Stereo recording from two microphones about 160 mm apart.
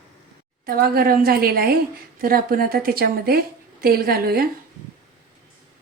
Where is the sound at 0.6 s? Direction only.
70° right (ahead or behind).